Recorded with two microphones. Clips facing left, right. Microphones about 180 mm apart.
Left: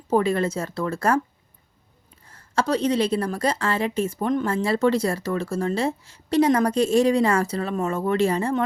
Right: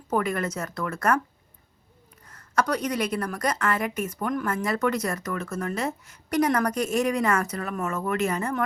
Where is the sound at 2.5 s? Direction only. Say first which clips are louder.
Left 4 dB; 25° left (ahead or behind).